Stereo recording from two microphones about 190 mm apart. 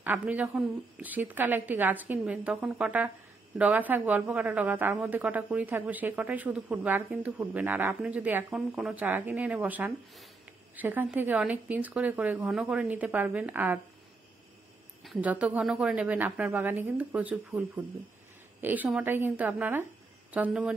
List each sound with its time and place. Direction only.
0.0 s speech: 10° right (ahead or behind)
15.0 s a woman's voice: 5° right (ahead or behind)